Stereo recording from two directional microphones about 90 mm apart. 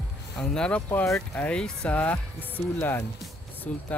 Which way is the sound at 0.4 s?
10° left (ahead or behind).